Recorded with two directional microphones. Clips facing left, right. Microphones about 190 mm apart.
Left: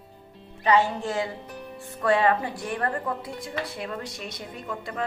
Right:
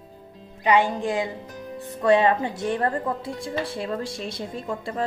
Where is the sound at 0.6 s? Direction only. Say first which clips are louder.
Right 2 dB; 15° right (ahead or behind).